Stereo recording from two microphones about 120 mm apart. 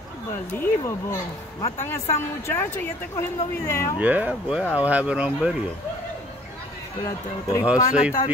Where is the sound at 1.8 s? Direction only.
20° left (ahead or behind).